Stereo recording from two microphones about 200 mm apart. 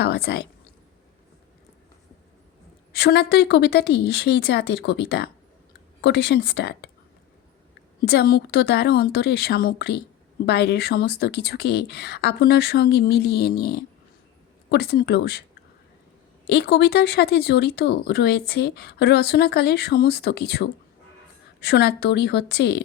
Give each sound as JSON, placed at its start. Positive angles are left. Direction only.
{"t": 0.0, "sound": "speech", "side_deg": 55}
{"t": 2.9, "sound": "speech", "side_deg": 55}
{"t": 8.0, "sound": "speech", "side_deg": 55}
{"t": 16.5, "sound": "speech", "side_deg": 55}